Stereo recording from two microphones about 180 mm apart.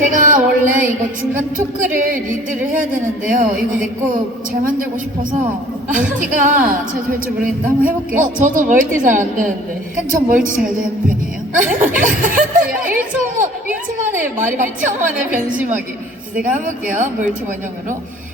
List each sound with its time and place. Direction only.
0.0 s music: 45° right (ahead or behind)
1.3 s a woman's voice: 45° right (ahead or behind)
5.9 s a woman's voice: 45° right (ahead or behind)